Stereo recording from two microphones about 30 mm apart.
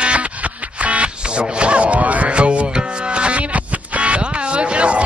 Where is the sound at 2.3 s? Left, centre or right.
Right.